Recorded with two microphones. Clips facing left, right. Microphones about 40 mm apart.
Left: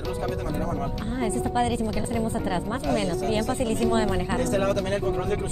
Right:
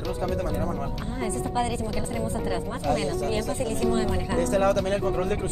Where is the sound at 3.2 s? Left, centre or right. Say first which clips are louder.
Left 2 dB; left.